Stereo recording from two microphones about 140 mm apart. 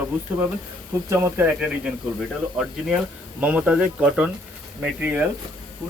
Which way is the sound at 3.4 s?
10° right (ahead or behind).